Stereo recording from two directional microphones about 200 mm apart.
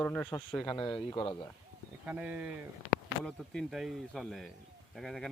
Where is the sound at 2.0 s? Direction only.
10° right (ahead or behind).